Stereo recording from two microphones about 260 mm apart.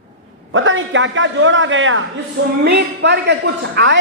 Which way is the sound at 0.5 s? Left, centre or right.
Right.